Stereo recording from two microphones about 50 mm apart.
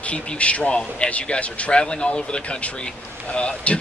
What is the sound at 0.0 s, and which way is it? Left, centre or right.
Speech, left.